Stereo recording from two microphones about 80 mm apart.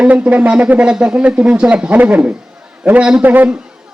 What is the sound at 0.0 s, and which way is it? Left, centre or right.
A man's voice, centre.